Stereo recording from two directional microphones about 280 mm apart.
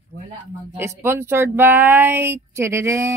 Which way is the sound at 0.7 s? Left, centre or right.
Centre.